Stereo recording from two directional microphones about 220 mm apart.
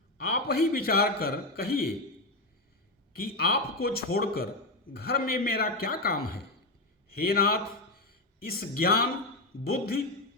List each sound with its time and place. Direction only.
0.2 s a man's voice: 45° left (ahead or behind)
3.2 s a man's voice: 45° left (ahead or behind)